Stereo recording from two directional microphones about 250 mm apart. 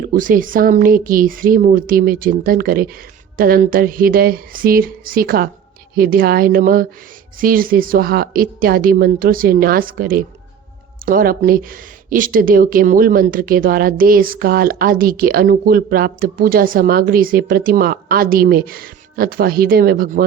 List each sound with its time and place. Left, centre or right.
0.1 s speech: right